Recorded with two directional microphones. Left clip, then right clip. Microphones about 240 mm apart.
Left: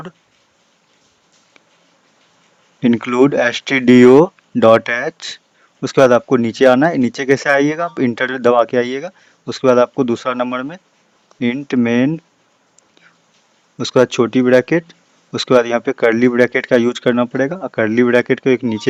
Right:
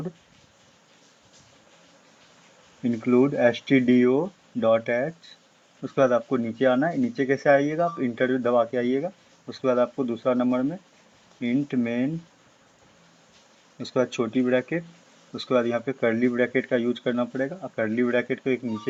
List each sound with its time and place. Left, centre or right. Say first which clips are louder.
2.8 s speech: left 9 dB; left
13.8 s speech: left 12 dB; left